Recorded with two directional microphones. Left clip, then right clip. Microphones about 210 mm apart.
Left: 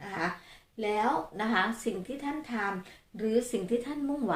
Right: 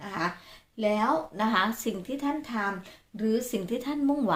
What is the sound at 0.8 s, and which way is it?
A woman's voice, 40° right (ahead or behind).